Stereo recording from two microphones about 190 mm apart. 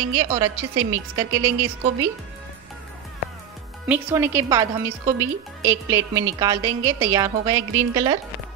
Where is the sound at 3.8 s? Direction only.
10° right (ahead or behind).